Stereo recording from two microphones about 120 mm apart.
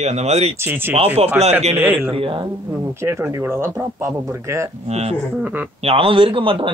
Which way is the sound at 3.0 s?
20° right (ahead or behind).